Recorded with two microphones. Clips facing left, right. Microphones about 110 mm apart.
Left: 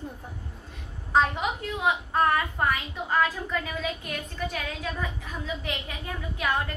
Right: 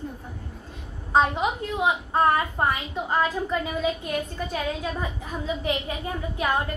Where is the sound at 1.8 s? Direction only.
25° right (ahead or behind).